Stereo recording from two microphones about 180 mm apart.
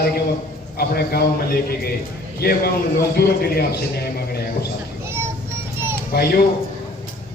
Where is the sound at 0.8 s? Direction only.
60° left (ahead or behind).